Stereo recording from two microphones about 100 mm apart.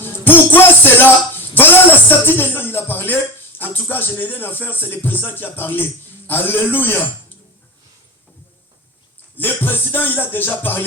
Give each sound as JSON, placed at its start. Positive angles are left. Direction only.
{"t": 0.0, "sound": "a sound", "side_deg": 20}
{"t": 3.6, "sound": "speech", "side_deg": 20}
{"t": 9.3, "sound": "speech", "side_deg": 20}